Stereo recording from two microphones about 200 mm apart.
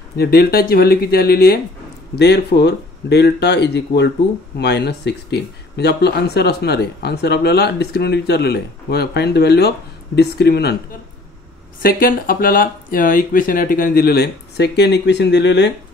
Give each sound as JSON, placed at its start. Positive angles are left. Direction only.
{"t": 0.2, "sound": "speech", "side_deg": 50}
{"t": 11.8, "sound": "speech", "side_deg": 45}